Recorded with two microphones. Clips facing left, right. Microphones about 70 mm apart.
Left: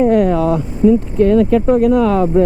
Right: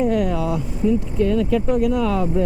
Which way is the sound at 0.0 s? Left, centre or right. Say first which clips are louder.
Left 8 dB; left.